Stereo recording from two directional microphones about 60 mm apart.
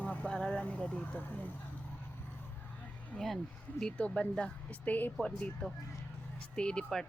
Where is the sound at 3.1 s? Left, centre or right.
Left.